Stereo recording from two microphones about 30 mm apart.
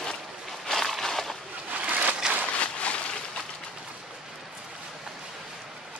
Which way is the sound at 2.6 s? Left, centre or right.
Left.